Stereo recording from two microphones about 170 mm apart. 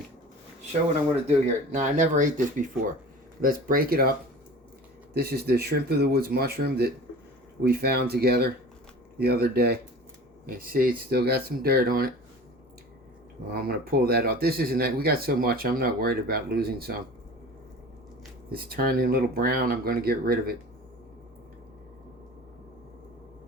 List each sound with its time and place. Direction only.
1.7 s speech: 50° right (ahead or behind)
5.1 s speech: 70° right (ahead or behind)
13.5 s speech: 65° right (ahead or behind)
18.5 s speech: 60° right (ahead or behind)